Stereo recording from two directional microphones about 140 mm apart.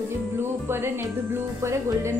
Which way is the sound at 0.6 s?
15° right (ahead or behind).